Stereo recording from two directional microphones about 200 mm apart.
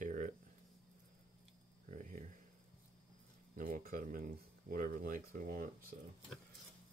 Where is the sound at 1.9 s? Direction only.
40° right (ahead or behind).